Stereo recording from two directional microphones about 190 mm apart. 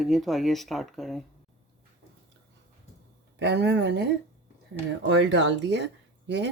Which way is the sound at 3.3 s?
65° right (ahead or behind).